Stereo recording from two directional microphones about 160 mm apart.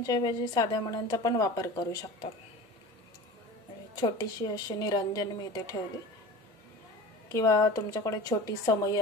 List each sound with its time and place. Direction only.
0.0 s a woman's voice: 25° left (ahead or behind)
3.9 s a woman's voice: 25° left (ahead or behind)
7.2 s a woman's voice: 20° left (ahead or behind)